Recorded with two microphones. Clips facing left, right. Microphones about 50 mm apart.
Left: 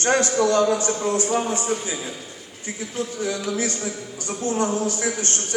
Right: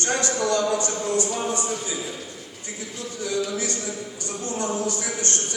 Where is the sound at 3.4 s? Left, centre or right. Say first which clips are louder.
Left 3 dB; left.